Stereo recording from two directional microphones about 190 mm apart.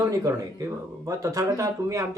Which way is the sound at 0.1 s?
15° right (ahead or behind).